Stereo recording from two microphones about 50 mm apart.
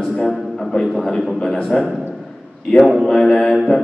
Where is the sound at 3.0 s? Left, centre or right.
Centre.